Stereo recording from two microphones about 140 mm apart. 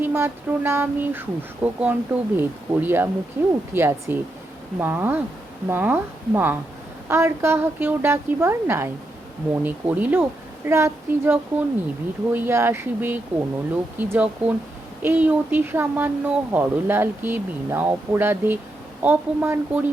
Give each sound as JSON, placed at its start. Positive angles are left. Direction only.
{"t": 0.0, "sound": "speech", "side_deg": -15}